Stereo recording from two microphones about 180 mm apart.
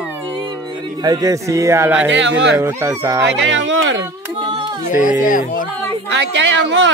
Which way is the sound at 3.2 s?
80° right.